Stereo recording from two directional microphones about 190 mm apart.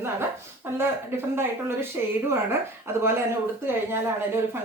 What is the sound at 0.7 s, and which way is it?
A woman's voice, 10° right (ahead or behind).